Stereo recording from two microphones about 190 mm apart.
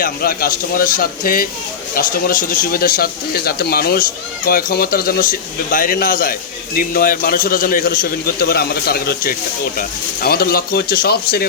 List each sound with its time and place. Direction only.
0.0 s speech: 50° left (ahead or behind)